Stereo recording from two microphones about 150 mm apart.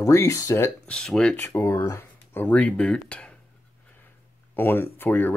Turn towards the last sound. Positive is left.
turn(degrees=10)  # may be behind; listen again after turning